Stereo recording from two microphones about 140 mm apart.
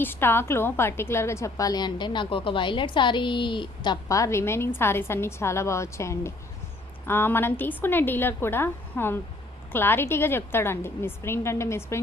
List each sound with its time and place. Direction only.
0.0 s a woman's voice: 15° left (ahead or behind); by 3.9 s 35° left (ahead or behind)
4.1 s a woman's voice: 20° left (ahead or behind)